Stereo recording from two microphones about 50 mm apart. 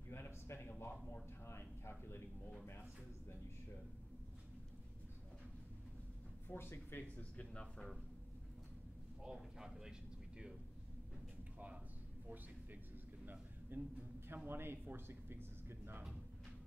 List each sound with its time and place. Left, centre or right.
0.1 s a sound: left
0.7 s speech: left
1.9 s a man's voice: left
6.5 s speech: left
7.2 s speech: left
9.2 s speech: centre
13.2 s a sound: right